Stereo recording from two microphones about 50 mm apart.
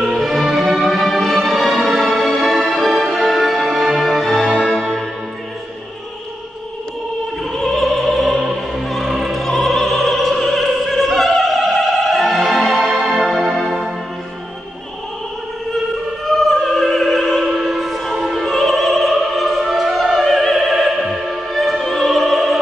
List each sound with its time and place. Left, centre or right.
0.6 s music: centre
1.9 s music: right
2.1 s music: centre
4.4 s music: centre
4.7 s music: centre
7.5 s opera: centre
8.8 s music: centre
12.5 s music: right
12.9 s music: centre
16.3 s opera: centre
19.9 s opera: centre
20.2 s opera: centre
21.3 s music: centre